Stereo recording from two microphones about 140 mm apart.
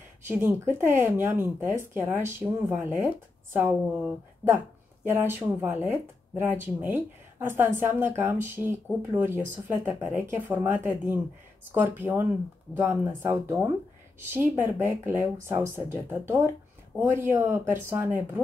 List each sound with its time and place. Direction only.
0.3 s speech: 15° right (ahead or behind)